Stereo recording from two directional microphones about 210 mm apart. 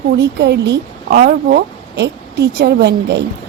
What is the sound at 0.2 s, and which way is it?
A woman's voice, 55° right (ahead or behind).